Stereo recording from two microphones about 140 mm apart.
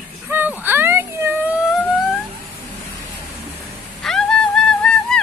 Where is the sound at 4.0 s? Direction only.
5° left (ahead or behind).